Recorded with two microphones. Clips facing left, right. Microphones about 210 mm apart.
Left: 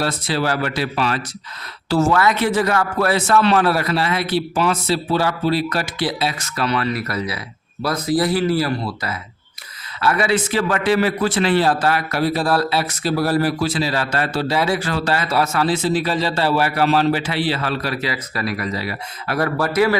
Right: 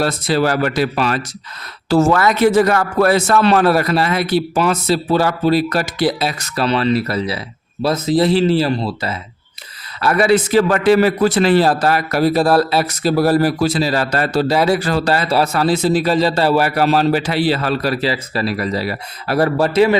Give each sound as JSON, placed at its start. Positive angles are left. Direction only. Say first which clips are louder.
{"t": 0.0, "sound": "a man's voice", "louder": "right 5 dB", "side_deg": -45}
{"t": 10.0, "sound": "a man's voice", "louder": "right 5 dB", "side_deg": -40}